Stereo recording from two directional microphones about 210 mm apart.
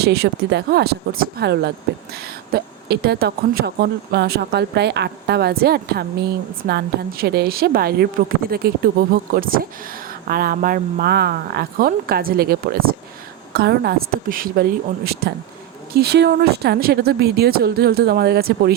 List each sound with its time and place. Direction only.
0.0 s speech: 50° right (ahead or behind)